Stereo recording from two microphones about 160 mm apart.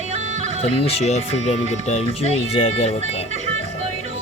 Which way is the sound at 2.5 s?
40° left (ahead or behind).